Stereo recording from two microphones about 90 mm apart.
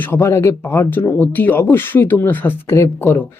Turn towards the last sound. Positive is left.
turn(degrees=25)  # may be behind; listen again after turning